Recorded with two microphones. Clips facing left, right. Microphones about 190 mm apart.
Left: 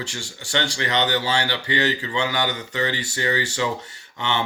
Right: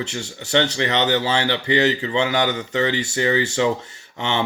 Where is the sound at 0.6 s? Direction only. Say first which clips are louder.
Even; 30° right (ahead or behind).